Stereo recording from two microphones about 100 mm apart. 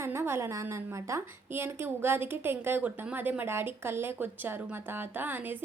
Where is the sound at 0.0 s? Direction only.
25° right (ahead or behind).